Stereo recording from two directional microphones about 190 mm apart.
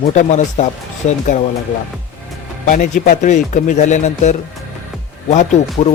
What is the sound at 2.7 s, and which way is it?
Speech, 45° left (ahead or behind).